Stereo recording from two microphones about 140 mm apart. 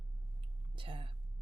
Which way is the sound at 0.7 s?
40° right (ahead or behind).